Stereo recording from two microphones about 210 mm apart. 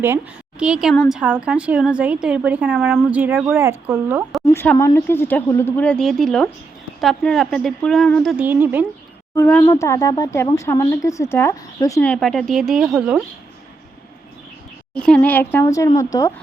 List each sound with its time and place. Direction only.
0.6 s speech: 5° right (ahead or behind)
4.4 s a woman's voice: 10° left (ahead or behind); by 8.9 s 10° right (ahead or behind)
9.3 s speech: 10° left (ahead or behind)
14.9 s speech: 5° left (ahead or behind)